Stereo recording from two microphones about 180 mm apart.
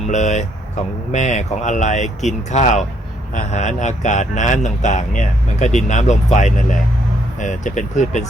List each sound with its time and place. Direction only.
0.1 s speech: 40° left (ahead or behind)